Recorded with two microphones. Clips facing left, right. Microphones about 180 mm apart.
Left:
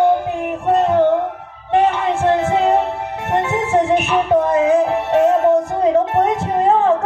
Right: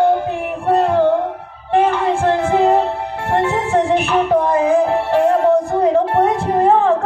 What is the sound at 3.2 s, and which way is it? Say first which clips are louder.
Music: right 1 dB; 20° left (ahead or behind).